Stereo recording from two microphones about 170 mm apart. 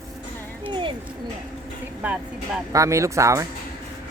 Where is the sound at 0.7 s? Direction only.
30° right (ahead or behind).